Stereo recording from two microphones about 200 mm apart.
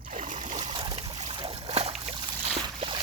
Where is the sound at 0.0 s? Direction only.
40° right (ahead or behind).